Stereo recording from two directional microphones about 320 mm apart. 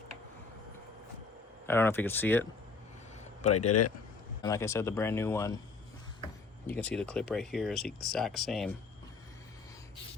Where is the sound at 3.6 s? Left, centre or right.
Left.